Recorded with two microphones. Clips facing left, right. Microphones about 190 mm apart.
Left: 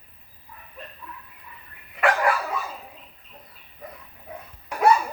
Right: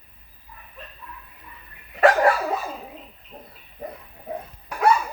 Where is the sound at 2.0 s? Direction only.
40° right (ahead or behind).